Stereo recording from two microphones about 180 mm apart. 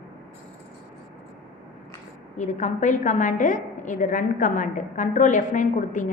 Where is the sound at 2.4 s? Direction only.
40° left (ahead or behind).